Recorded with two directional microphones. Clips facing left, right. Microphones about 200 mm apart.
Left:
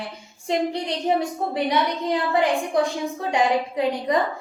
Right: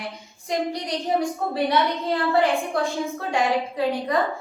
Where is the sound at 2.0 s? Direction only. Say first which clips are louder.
Even; 15° left (ahead or behind).